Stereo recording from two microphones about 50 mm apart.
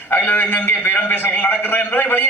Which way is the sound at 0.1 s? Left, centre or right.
Left.